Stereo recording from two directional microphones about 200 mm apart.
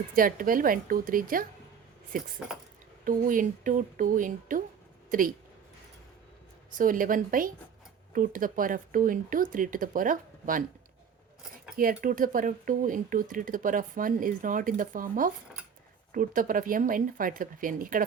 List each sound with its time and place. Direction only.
0.2 s speech: 45° right (ahead or behind)
6.7 s speech: 45° right (ahead or behind)
11.8 s speech: 45° right (ahead or behind)